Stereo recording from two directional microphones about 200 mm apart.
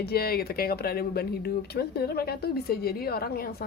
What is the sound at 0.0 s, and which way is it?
Speech, 50° left (ahead or behind).